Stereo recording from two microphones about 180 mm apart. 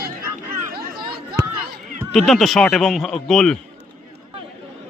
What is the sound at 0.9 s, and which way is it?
Chatter, 25° right (ahead or behind).